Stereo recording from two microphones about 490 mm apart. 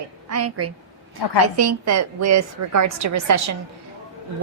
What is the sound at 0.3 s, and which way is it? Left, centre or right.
A woman's voice, right.